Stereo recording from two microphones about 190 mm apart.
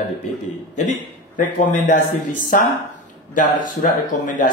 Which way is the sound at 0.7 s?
40° left (ahead or behind).